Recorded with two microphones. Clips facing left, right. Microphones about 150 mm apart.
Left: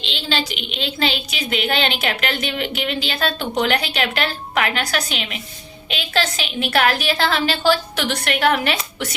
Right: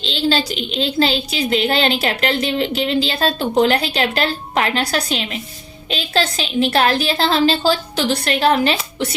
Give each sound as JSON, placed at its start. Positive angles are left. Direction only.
{"t": 0.0, "sound": "a woman's voice", "side_deg": -35}